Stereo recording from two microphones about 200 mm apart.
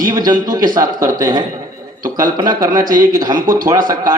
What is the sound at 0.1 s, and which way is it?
A man's voice, 20° right (ahead or behind).